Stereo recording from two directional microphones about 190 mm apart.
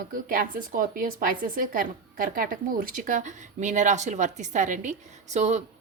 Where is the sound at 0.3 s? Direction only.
45° right (ahead or behind).